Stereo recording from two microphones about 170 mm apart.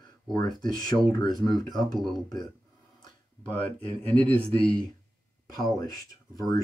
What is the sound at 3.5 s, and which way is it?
Speech, 10° left (ahead or behind).